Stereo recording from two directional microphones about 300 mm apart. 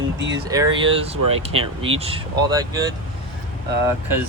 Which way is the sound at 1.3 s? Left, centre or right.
Centre.